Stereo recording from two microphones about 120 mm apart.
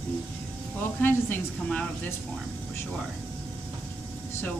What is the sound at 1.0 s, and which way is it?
Speech, 15° left (ahead or behind).